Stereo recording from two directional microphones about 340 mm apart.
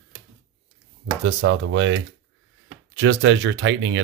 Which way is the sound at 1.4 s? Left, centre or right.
Right.